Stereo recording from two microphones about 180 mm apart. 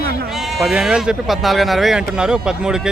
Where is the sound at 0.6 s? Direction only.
5° right (ahead or behind).